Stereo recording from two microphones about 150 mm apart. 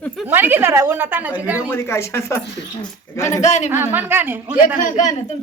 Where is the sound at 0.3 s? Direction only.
15° right (ahead or behind).